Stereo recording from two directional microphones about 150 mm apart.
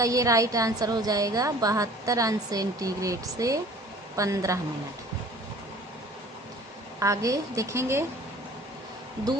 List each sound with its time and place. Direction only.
0.0 s a woman's voice: 20° right (ahead or behind)
7.0 s a woman's voice: 20° right (ahead or behind)